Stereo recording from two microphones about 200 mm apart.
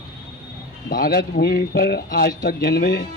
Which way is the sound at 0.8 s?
45° left (ahead or behind).